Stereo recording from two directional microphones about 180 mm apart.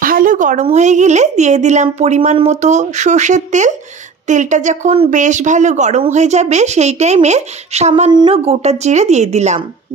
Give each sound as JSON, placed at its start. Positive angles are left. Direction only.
{"t": 0.0, "sound": "speech", "side_deg": -50}